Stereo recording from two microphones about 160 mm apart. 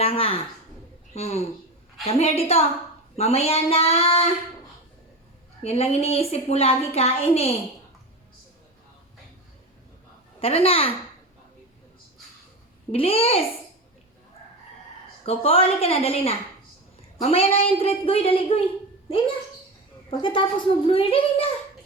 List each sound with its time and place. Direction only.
0.0 s a woman's voice: 35° left (ahead or behind)
5.6 s a woman's voice: 40° left (ahead or behind)
10.4 s a woman's voice: 40° left (ahead or behind)
12.9 s a woman's voice: 35° left (ahead or behind)
15.3 s a woman's voice: 35° left (ahead or behind)
20.1 s a woman's voice: 30° left (ahead or behind)